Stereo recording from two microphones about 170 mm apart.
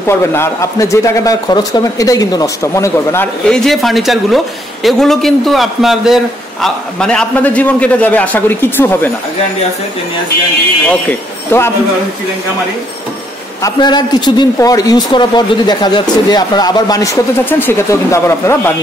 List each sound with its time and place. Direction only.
0.0 s speech: 15° left (ahead or behind)
3.4 s a man's voice: 5° left (ahead or behind)
10.9 s speech: 10° left (ahead or behind)
13.6 s a man's voice: 20° left (ahead or behind)